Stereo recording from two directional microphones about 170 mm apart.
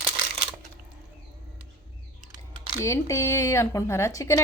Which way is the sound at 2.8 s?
15° left (ahead or behind).